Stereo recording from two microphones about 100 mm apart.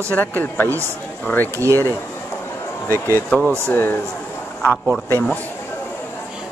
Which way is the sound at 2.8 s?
30° right (ahead or behind).